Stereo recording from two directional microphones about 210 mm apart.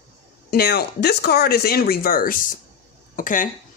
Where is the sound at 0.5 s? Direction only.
50° left (ahead or behind).